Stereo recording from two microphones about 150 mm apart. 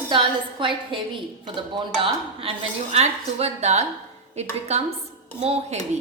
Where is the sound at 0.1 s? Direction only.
35° right (ahead or behind).